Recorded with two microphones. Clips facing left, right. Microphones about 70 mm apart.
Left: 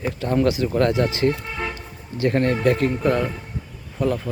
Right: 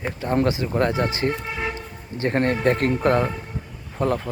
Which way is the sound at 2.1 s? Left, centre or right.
Right.